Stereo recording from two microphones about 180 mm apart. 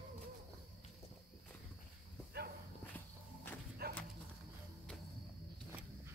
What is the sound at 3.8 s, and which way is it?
Livestock, 60° right (ahead or behind).